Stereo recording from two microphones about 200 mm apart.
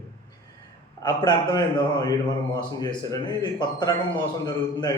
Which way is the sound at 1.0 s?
20° left (ahead or behind).